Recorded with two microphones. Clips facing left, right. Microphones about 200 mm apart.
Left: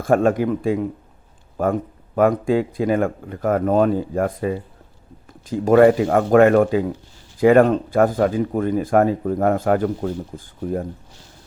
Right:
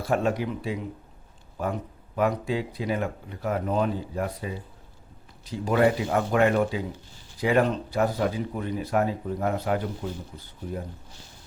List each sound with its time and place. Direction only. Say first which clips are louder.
0.0 s speech: left 8 dB; 50° left (ahead or behind)